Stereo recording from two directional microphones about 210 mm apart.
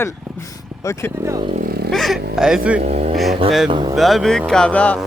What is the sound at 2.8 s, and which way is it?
Speech, 30° right (ahead or behind).